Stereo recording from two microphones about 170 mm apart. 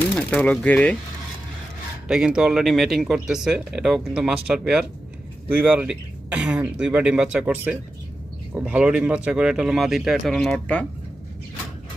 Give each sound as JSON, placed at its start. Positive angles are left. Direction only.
{"t": 0.2, "sound": "speech", "side_deg": 10}
{"t": 2.0, "sound": "speech", "side_deg": -5}